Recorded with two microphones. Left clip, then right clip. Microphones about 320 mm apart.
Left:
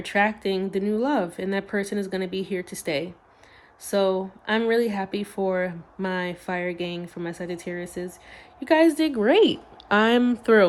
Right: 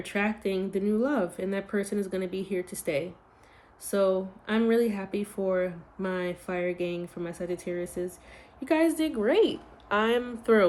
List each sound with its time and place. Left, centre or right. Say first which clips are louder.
0.0 s speech: left 7 dB; left